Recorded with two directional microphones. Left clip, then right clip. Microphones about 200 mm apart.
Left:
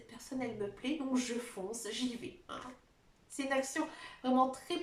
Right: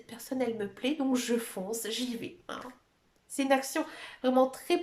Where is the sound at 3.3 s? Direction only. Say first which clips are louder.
Right 7 dB; 50° right (ahead or behind).